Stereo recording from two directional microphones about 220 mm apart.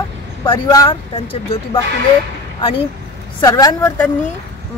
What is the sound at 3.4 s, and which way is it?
Speech, 15° left (ahead or behind).